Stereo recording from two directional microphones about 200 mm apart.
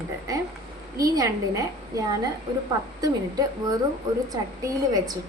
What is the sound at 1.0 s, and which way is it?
A woman's voice, 20° right (ahead or behind).